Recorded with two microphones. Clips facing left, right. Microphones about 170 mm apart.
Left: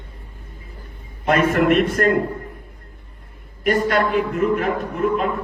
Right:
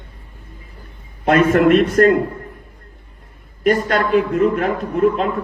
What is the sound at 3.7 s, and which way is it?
A man's voice, 55° right (ahead or behind).